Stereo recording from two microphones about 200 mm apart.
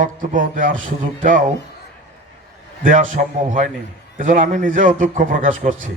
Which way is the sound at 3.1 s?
40° right (ahead or behind).